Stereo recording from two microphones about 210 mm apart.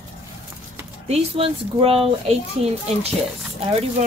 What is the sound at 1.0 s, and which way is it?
Speech, 25° right (ahead or behind).